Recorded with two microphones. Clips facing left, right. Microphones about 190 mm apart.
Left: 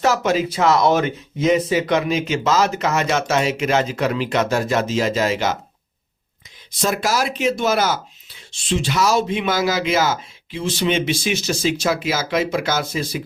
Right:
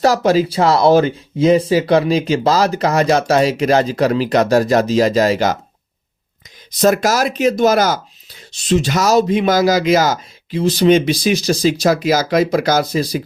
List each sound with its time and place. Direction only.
0.0 s speech: 35° right (ahead or behind)
6.7 s speech: 40° right (ahead or behind)